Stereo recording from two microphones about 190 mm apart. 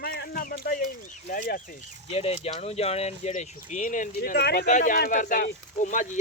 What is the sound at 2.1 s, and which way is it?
Speech, 30° left (ahead or behind).